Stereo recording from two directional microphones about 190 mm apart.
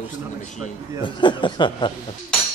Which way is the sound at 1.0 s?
25° left (ahead or behind).